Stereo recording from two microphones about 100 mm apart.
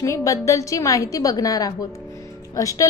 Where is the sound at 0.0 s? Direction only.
30° left (ahead or behind).